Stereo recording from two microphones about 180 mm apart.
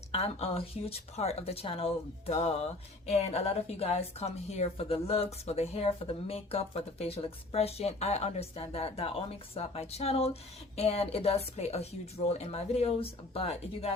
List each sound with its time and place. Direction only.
0.1 s speech: 35° left (ahead or behind)